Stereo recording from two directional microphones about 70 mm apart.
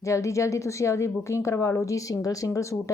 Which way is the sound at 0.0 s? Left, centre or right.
Left.